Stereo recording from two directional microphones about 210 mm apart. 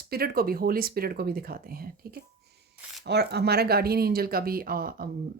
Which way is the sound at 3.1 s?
50° right (ahead or behind).